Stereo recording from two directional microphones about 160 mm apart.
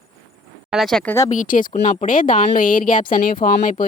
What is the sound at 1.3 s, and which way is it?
Speech, 55° left (ahead or behind).